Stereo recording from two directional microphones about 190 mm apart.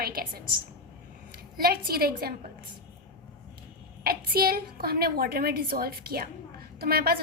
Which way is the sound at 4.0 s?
55° right (ahead or behind).